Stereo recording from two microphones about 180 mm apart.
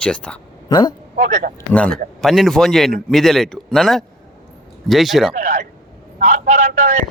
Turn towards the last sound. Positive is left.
turn(degrees=-45)  # may be behind; listen again after turning